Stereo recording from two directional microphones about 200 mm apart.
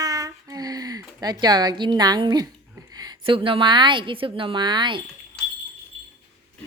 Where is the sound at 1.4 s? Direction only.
20° right (ahead or behind).